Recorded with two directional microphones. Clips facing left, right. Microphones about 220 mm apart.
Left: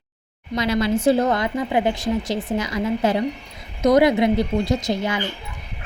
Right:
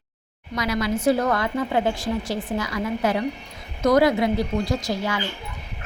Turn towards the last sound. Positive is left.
turn(degrees=20)  # may be behind; listen again after turning